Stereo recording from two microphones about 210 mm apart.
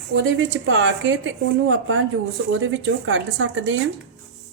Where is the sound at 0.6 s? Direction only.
65° right (ahead or behind).